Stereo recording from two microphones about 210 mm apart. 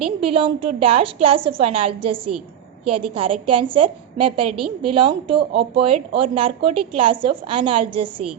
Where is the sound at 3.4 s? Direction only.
25° right (ahead or behind).